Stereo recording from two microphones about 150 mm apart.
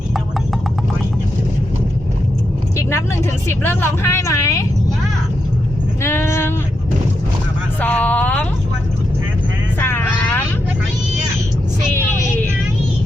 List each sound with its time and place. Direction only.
3.5 s a woman's voice: 15° left (ahead or behind)
6.0 s a sound: 15° left (ahead or behind)
7.8 s a woman's voice: 10° left (ahead or behind)
9.8 s vehicle: 15° left (ahead or behind)
11.9 s vehicle: 15° left (ahead or behind)